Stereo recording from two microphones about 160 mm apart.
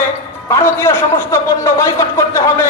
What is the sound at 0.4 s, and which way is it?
A man's voice, 15° left (ahead or behind).